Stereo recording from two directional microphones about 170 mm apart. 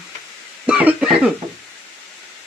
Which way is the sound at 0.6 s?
5° right (ahead or behind).